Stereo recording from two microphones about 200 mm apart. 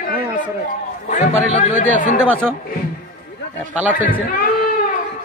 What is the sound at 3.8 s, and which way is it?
Speech, 10° right (ahead or behind).